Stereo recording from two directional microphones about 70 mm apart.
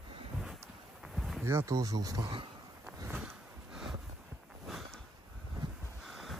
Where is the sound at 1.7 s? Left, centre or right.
Right.